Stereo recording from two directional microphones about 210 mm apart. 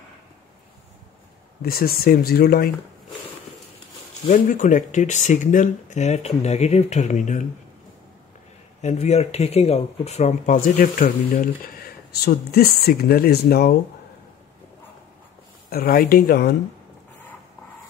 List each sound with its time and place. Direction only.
1.6 s speech: 45° left (ahead or behind)
4.3 s speech: 35° left (ahead or behind)
8.8 s speech: 30° left (ahead or behind); by 13.7 s 45° left (ahead or behind)
15.7 s speech: 45° left (ahead or behind)